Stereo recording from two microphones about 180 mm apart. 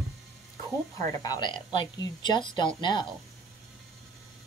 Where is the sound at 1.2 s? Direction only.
25° left (ahead or behind).